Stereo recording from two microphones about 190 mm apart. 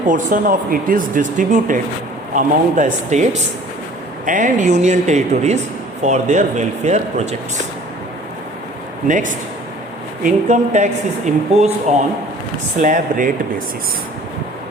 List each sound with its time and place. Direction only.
0.1 s speech: 45° right (ahead or behind)
9.0 s speech: 40° right (ahead or behind)
12.8 s speech: 45° right (ahead or behind)